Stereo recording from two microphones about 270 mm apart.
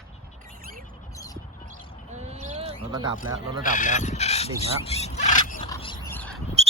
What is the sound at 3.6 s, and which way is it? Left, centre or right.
Speech, left.